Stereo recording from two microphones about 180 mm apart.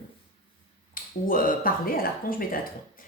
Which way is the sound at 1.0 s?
50° left (ahead or behind).